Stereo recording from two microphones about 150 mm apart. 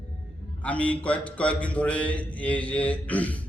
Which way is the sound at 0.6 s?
10° left (ahead or behind).